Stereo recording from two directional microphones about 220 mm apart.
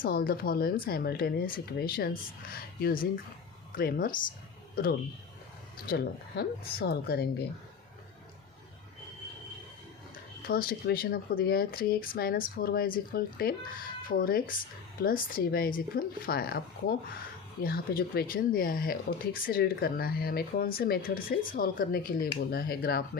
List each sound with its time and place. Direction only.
0.0 s speech: 40° left (ahead or behind)
10.5 s speech: 45° left (ahead or behind)